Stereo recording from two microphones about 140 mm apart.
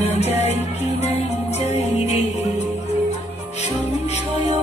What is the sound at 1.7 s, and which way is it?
Music, 50° left (ahead or behind).